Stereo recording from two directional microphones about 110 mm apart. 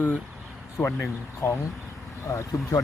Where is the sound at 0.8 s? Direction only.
5° right (ahead or behind).